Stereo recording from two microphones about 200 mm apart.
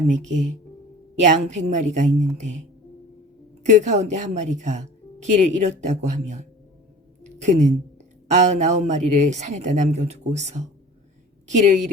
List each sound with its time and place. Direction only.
0.1 s speech: 35° right (ahead or behind)
3.7 s speech: 35° right (ahead or behind)
7.3 s a sound: 35° right (ahead or behind)
8.3 s speech: 35° right (ahead or behind)